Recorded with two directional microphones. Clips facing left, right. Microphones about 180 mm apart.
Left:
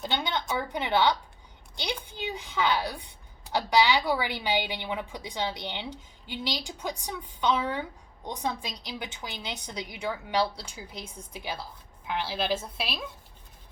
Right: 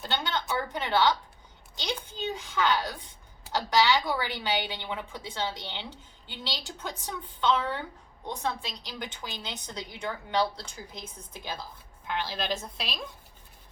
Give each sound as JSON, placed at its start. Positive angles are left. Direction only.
{"t": 0.0, "sound": "speech", "side_deg": 15}